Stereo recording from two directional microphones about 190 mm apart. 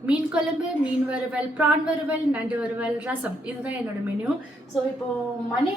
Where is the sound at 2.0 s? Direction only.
10° right (ahead or behind).